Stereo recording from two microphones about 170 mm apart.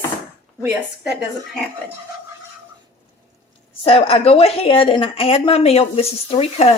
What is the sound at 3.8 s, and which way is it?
A woman's voice, 35° left (ahead or behind).